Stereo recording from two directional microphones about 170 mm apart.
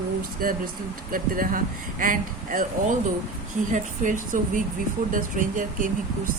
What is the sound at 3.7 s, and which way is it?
Speech, 50° right (ahead or behind).